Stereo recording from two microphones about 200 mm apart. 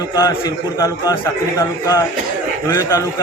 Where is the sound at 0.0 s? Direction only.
15° left (ahead or behind).